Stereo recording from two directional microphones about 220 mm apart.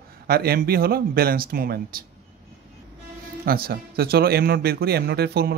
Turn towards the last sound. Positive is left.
turn(degrees=-45)  # may be behind; listen again after turning